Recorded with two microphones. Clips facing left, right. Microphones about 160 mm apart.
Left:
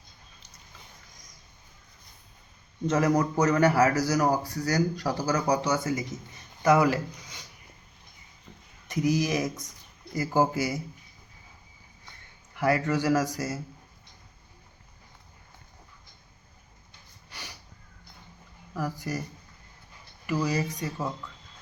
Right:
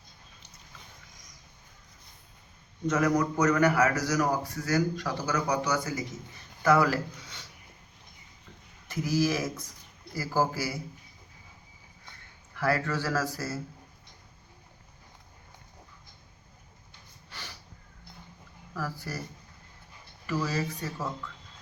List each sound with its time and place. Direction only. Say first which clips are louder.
2.8 s a man's voice: left 2 dB; 30° left (ahead or behind)
8.9 s a man's voice: left 2 dB; 20° left (ahead or behind)
12.5 s speech: left 3 dB; 20° left (ahead or behind)
17.3 s a sound: even; 15° left (ahead or behind)
18.7 s speech: left 4 dB; 15° left (ahead or behind)
20.2 s speech: left 3 dB; 15° left (ahead or behind)